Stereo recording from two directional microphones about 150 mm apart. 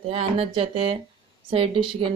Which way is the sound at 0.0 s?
40° right (ahead or behind).